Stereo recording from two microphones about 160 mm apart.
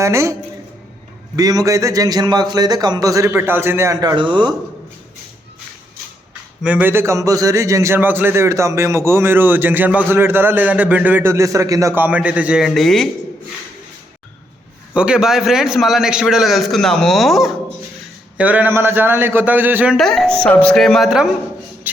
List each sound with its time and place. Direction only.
0.0 s speech: 20° right (ahead or behind)
1.4 s speech: 25° right (ahead or behind)
4.1 s speech: 30° right (ahead or behind)
6.6 s a man's voice: 10° right (ahead or behind)
14.9 s a man's voice: 5° right (ahead or behind)
20.0 s a man's voice: 5° left (ahead or behind)